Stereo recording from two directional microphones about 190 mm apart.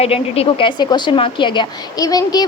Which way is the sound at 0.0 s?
30° left (ahead or behind).